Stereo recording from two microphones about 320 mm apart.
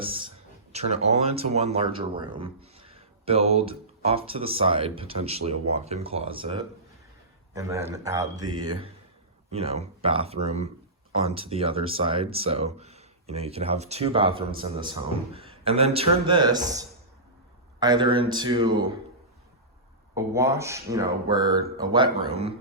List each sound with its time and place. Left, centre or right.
0.0 s a sound: centre
0.7 s speech: centre
20.1 s speech: centre